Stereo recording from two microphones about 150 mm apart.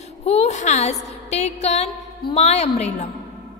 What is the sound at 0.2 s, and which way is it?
A woman's voice, 45° left (ahead or behind).